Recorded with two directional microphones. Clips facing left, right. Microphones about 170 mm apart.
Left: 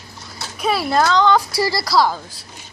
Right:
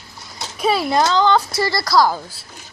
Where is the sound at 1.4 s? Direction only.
10° left (ahead or behind).